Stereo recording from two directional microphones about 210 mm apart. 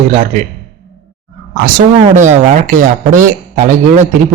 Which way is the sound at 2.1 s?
35° right (ahead or behind).